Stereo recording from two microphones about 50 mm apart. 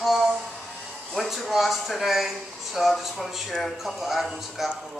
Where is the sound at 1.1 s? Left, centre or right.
Centre.